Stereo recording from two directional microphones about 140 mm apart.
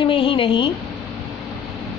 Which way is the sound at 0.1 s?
40° left (ahead or behind).